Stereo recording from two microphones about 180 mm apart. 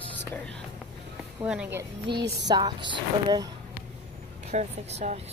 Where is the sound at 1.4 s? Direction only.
5° right (ahead or behind).